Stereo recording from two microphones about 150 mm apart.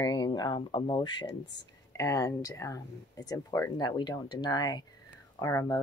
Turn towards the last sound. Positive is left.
turn(degrees=20)  # may be behind; listen again after turning